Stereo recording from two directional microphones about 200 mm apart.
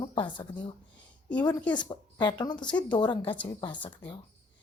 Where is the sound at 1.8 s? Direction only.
20° left (ahead or behind).